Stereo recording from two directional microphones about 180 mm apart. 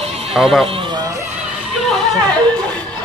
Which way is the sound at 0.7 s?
30° right (ahead or behind).